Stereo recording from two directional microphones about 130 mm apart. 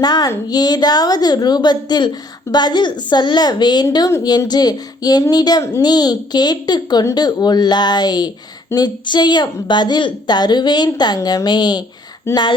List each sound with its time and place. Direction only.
0.0 s a woman's voice: 30° left (ahead or behind)